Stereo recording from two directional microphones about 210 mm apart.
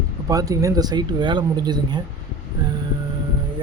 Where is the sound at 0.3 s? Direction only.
15° right (ahead or behind).